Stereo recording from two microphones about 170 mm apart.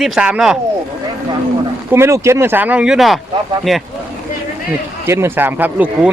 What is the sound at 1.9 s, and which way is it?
Speech, 15° right (ahead or behind).